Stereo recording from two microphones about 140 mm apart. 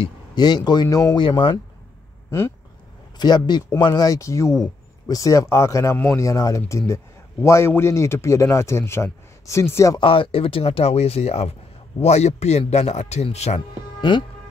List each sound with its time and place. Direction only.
0.0 s speech: 30° left (ahead or behind)
3.2 s speech: 30° left (ahead or behind)
9.9 s speech: 40° left (ahead or behind)
14.1 s speech: 35° left (ahead or behind)